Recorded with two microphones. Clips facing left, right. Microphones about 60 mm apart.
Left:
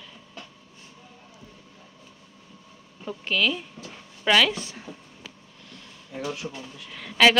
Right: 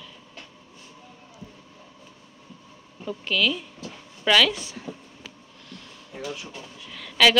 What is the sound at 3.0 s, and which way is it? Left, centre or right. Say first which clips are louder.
Speech: even; left.